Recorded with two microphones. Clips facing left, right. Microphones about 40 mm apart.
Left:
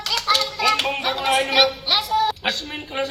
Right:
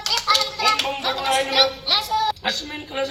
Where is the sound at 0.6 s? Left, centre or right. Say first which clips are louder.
Left 1 dB; centre.